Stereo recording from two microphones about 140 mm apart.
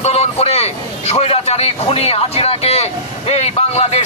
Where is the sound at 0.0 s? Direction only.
45° left (ahead or behind).